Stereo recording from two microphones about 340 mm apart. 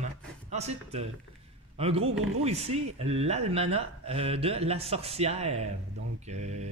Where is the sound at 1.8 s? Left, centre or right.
Centre.